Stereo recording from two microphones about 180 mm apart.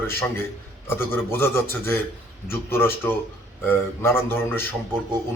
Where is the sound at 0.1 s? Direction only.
15° left (ahead or behind).